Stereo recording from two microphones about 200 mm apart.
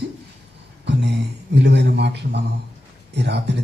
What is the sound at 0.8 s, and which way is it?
A man's voice, 60° right (ahead or behind).